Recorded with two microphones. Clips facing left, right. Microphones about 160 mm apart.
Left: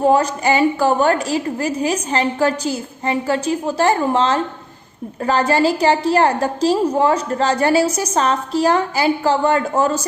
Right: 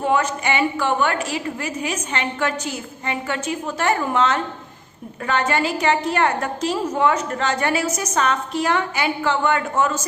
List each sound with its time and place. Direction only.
0.0 s a woman's voice: 35° left (ahead or behind)